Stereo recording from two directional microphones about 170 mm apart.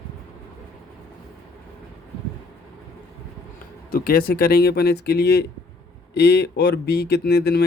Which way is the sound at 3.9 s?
60° left (ahead or behind).